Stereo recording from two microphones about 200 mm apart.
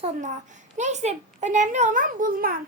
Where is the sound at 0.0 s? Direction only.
35° right (ahead or behind).